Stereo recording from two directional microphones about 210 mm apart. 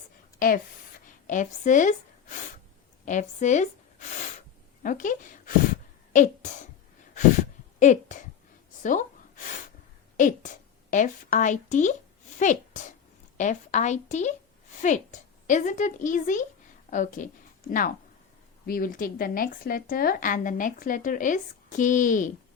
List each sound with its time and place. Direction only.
0.3 s a sound: 40° left (ahead or behind)
3.1 s speech: 35° left (ahead or behind)
4.8 s a woman's voice: 40° left (ahead or behind)
7.8 s speech: 35° left (ahead or behind)
8.8 s a sound: 40° left (ahead or behind)
10.2 s a woman's voice: 35° left (ahead or behind)